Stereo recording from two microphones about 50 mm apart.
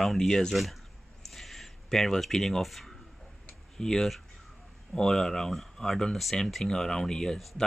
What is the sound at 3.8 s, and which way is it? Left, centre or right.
Speech, centre.